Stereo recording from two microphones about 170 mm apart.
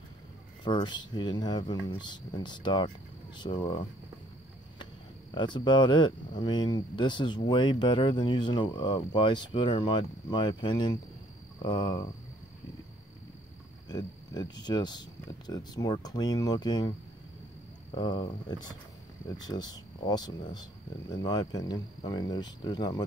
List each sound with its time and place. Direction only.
0.7 s speech: 25° left (ahead or behind)
5.3 s speech: 25° left (ahead or behind)
13.8 s speech: 25° left (ahead or behind)
17.9 s speech: 25° left (ahead or behind)